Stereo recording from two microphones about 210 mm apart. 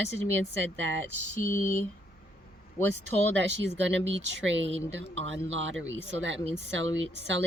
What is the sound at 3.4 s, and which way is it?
Speech, 60° right (ahead or behind).